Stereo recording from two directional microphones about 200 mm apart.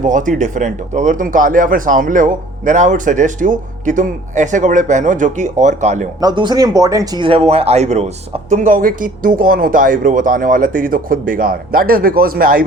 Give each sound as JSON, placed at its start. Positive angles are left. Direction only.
{"t": 0.0, "sound": "speech", "side_deg": -40}
{"t": 6.1, "sound": "speech", "side_deg": -20}